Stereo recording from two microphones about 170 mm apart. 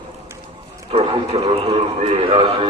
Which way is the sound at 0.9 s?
35° right (ahead or behind).